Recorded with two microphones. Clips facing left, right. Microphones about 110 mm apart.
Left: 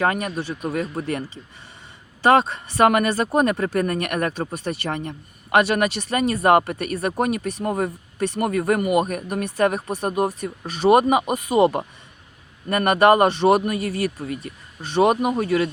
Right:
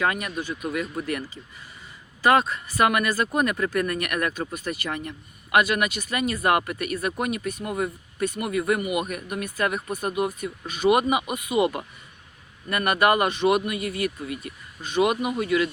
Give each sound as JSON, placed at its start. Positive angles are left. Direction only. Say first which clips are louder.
{"t": 0.0, "sound": "speech", "louder": "left 4 dB", "side_deg": 35}
{"t": 2.2, "sound": "speech", "louder": "left 3 dB", "side_deg": 25}